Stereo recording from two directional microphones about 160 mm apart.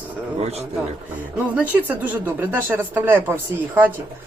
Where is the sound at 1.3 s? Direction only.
10° right (ahead or behind).